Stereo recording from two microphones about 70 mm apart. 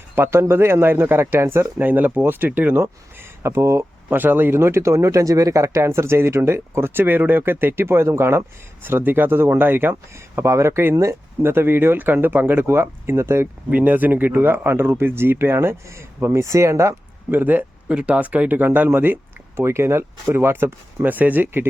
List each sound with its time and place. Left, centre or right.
0.2 s speech: right
1.8 s speech: right
3.4 s speech: right
4.2 s speech: right
10.3 s speech: right
13.7 s speech: right
17.3 s speech: right